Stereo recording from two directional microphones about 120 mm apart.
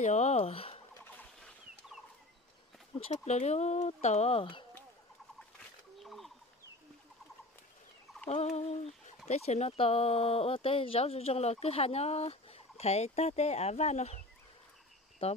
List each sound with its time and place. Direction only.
0.0 s fowl: 75° left (ahead or behind); by 0.7 s 55° left (ahead or behind)
3.0 s fowl: 65° left (ahead or behind); by 4.6 s 45° left (ahead or behind)
5.9 s a sound: centre (ahead or behind)
8.3 s fowl: 65° left (ahead or behind)
15.2 s cricket: 55° left (ahead or behind)